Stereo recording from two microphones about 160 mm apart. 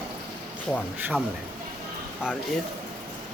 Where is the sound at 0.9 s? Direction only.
10° right (ahead or behind).